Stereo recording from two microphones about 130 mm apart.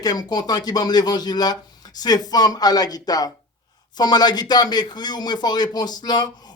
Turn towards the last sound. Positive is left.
turn(degrees=30)  # may be behind; listen again after turning